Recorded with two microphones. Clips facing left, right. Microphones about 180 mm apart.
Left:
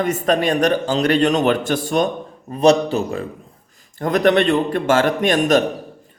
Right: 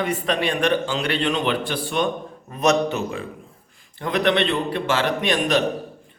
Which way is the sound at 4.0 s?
45° left (ahead or behind).